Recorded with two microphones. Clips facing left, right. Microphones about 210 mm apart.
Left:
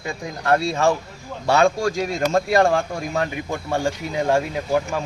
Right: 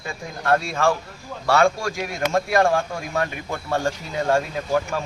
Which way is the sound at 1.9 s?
30° left (ahead or behind).